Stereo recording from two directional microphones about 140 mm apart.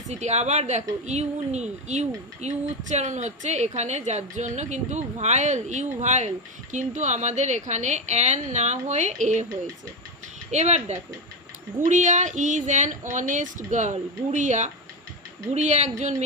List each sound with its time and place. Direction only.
0.1 s a woman's voice: 55° right (ahead or behind)
10.5 s a woman's voice: 55° right (ahead or behind)